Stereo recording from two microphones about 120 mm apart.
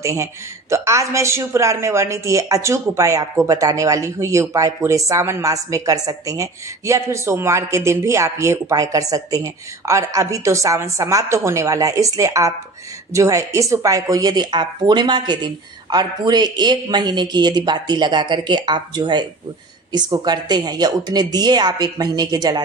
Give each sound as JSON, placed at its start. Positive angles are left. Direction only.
{"t": 0.0, "sound": "a woman's voice", "side_deg": -25}